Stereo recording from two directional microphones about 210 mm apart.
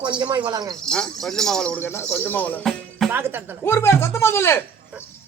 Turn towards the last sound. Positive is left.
turn(degrees=10)  # may be behind; listen again after turning